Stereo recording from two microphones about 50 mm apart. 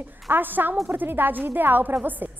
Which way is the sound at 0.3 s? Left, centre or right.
Right.